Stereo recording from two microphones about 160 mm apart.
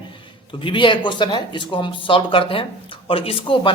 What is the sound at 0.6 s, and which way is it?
Speech, 30° left (ahead or behind).